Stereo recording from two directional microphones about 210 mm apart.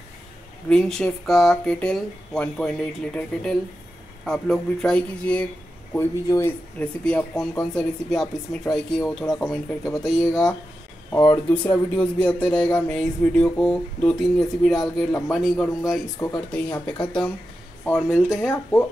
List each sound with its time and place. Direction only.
0.7 s speech: 5° left (ahead or behind)
11.1 s speech: 15° left (ahead or behind)
16.2 s speech: 20° left (ahead or behind)
16.5 s speech: 5° left (ahead or behind)
17.9 s speech: centre (ahead or behind)
18.5 s speech: 10° left (ahead or behind)